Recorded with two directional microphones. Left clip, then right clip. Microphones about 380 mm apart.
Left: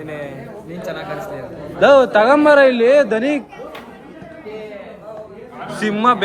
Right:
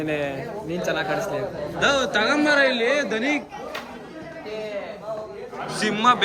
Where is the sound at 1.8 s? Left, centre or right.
Centre.